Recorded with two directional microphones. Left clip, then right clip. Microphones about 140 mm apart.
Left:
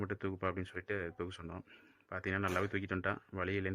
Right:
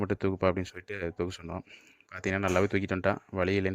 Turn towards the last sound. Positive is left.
turn(degrees=-45)  # may be behind; listen again after turning